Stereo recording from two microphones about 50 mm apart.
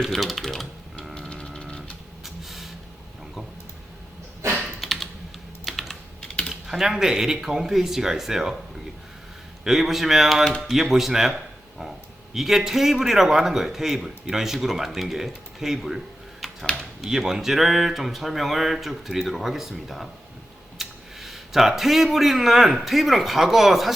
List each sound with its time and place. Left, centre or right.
0.0 s speech: centre
1.1 s music: centre
2.2 s a sound: centre
4.8 s typing: centre
6.2 s typing: left
6.5 s a man's voice: centre
9.6 s a man's voice: centre
16.4 s a sound: centre
17.0 s speech: centre